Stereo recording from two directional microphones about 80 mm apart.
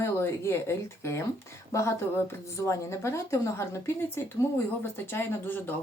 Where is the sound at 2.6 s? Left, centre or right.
Left.